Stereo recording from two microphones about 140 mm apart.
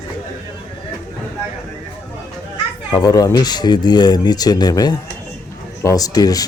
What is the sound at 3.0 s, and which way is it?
Speech, 25° left (ahead or behind).